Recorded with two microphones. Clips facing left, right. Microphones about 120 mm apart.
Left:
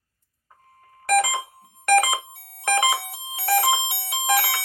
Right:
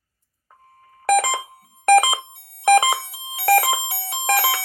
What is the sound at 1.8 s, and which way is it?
Alarm clock, 40° right (ahead or behind).